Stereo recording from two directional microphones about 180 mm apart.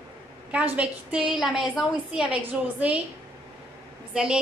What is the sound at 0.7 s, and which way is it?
A woman's voice, 5° right (ahead or behind).